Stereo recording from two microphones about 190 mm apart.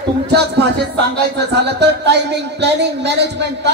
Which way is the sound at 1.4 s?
60° right (ahead or behind).